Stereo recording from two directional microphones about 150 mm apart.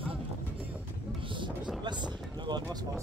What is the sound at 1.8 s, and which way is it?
Speech, 30° right (ahead or behind).